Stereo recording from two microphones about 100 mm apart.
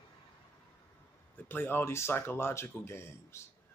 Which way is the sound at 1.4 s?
20° left (ahead or behind).